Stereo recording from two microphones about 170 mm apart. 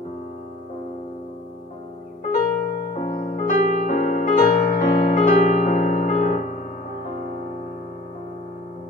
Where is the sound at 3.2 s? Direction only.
50° left (ahead or behind).